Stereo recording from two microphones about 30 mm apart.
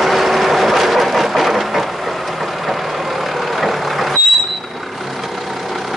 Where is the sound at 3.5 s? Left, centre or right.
Centre.